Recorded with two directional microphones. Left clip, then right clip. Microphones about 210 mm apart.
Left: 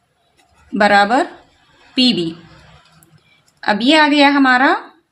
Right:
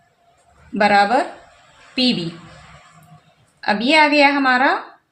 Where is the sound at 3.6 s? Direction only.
35° left (ahead or behind).